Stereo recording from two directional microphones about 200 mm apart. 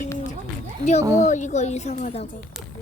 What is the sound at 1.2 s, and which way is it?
Speech, 35° left (ahead or behind).